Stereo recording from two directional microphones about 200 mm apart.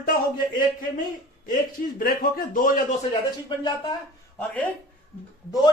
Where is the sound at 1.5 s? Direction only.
45° left (ahead or behind).